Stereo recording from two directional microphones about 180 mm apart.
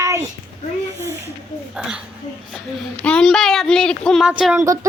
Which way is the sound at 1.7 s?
5° right (ahead or behind).